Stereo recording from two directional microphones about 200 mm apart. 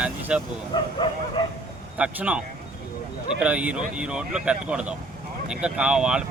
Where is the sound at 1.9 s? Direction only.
5° right (ahead or behind).